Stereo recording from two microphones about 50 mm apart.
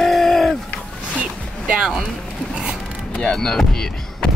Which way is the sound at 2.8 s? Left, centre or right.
Centre.